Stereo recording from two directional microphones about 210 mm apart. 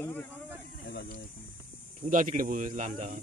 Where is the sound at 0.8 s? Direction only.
50° left (ahead or behind).